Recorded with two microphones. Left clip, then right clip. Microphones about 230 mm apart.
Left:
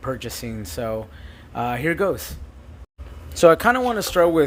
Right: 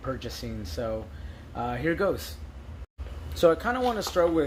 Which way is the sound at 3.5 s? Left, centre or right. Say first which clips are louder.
Left 10 dB; left.